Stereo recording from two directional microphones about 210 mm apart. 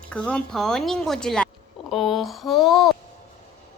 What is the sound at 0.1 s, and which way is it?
Speech, 5° left (ahead or behind).